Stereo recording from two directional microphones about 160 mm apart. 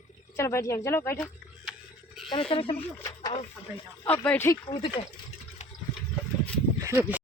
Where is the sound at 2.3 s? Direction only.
35° left (ahead or behind).